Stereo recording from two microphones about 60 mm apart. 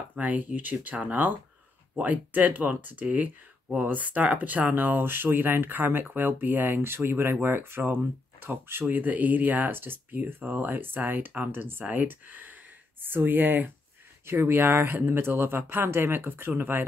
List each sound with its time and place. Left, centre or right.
0.1 s speech: right
8.8 s speech: right
14.2 s speech: right